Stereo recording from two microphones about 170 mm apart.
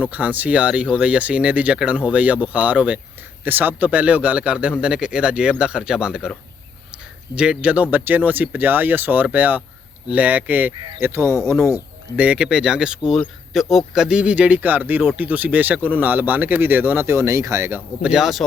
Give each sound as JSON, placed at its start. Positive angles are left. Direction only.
{"t": 0.0, "sound": "speech", "side_deg": -10}
{"t": 7.3, "sound": "speech", "side_deg": -5}